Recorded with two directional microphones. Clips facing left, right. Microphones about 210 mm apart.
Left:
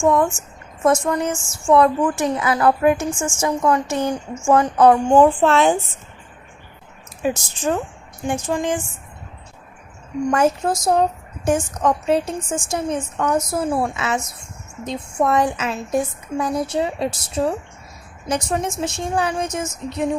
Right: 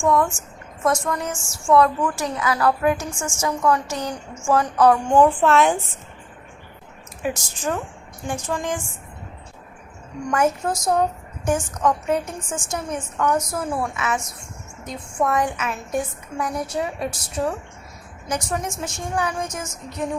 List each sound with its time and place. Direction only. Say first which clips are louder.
0.0 s a woman's voice: left 3 dB; 25° left (ahead or behind)
7.2 s a woman's voice: left 4 dB; 30° left (ahead or behind)
10.2 s a woman's voice: left 3 dB; 30° left (ahead or behind)
15.2 s a woman's voice: left 3 dB; 30° left (ahead or behind)